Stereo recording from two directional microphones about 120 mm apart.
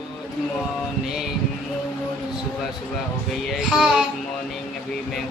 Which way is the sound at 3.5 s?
5° right (ahead or behind).